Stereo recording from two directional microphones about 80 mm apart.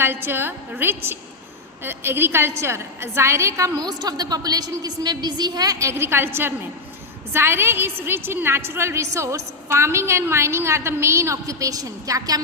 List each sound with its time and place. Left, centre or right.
0.0 s a woman's voice: right
3.8 s a woman's voice: right
5.8 s a woman's voice: right